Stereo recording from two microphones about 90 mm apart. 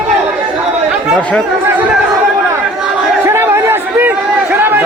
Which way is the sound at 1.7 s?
20° right (ahead or behind).